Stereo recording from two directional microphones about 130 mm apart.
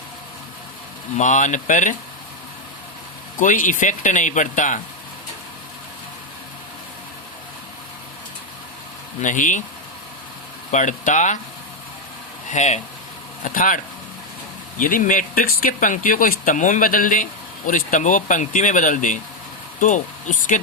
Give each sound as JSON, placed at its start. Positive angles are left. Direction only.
{"t": 1.2, "sound": "speech", "side_deg": 75}
{"t": 3.4, "sound": "speech", "side_deg": 90}
{"t": 9.2, "sound": "speech", "side_deg": 75}
{"t": 10.7, "sound": "speech", "side_deg": 70}
{"t": 12.5, "sound": "speech", "side_deg": 65}
{"t": 13.4, "sound": "speech", "side_deg": 90}